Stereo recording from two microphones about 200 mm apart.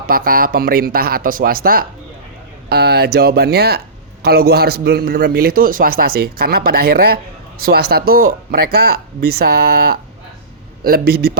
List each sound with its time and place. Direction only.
0.1 s a man's voice: 45° right (ahead or behind)